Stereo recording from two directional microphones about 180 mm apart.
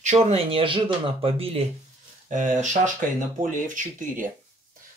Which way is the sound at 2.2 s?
45° right (ahead or behind).